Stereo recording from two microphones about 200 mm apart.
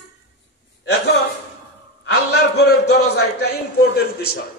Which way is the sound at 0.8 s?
60° left (ahead or behind).